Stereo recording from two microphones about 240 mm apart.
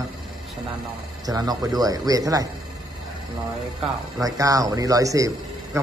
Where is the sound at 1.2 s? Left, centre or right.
Centre.